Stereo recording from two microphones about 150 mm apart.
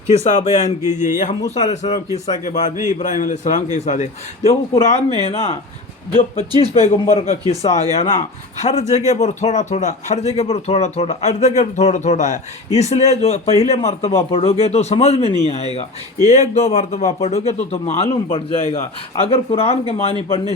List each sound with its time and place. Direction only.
0.3 s a man's voice: 50° left (ahead or behind)
6.6 s a man's voice: 40° left (ahead or behind)